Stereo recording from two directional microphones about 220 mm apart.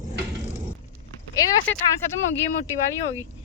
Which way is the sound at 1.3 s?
15° left (ahead or behind).